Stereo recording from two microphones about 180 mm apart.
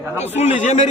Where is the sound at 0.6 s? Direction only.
40° left (ahead or behind).